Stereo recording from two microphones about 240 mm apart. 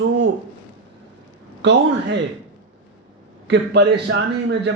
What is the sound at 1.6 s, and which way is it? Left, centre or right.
Speech, right.